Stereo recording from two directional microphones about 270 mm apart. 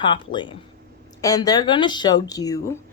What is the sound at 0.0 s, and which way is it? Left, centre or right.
Speech, centre.